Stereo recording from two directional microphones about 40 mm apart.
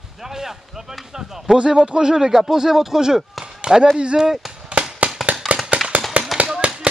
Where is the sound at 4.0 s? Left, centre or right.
Right.